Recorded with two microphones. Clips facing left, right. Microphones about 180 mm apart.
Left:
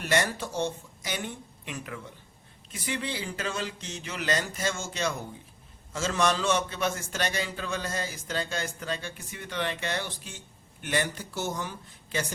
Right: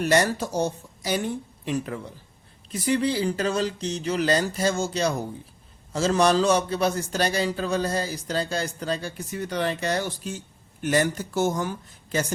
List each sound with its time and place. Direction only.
0.0 s a man's voice: 40° right (ahead or behind)